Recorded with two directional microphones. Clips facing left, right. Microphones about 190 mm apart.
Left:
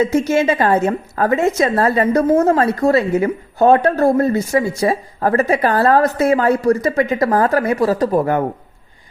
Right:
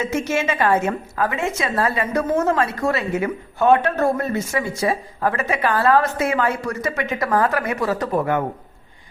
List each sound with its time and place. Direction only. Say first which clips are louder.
0.0 s a woman's voice: left 7 dB; 35° left (ahead or behind)